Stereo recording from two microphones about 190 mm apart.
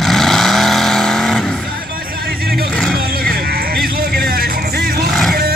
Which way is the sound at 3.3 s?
55° right (ahead or behind).